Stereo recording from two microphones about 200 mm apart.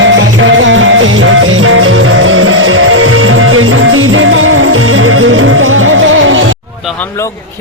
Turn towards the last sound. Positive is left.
turn(degrees=-80)